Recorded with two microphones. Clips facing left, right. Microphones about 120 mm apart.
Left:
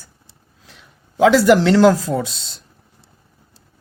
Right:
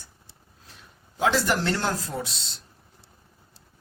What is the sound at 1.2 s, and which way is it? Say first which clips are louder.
Speech: left 12 dB; 85° left.